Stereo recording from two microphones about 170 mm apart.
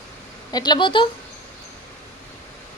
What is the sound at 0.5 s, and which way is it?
Speech, 25° left (ahead or behind).